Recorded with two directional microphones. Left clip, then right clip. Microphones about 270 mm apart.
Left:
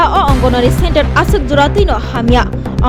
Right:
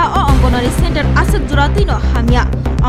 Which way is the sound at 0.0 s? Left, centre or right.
Centre.